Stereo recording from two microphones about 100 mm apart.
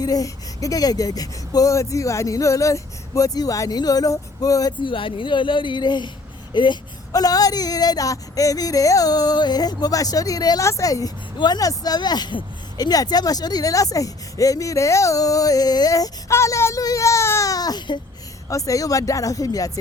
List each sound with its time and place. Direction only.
0.0 s speech: 35° left (ahead or behind)
4.8 s speech: 55° left (ahead or behind)
7.1 s speech: 40° left (ahead or behind)
18.4 s speech: 35° left (ahead or behind)